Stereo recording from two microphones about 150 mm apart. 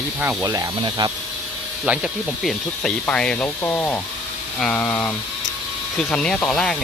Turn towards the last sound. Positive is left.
turn(degrees=5)  # may be behind; listen again after turning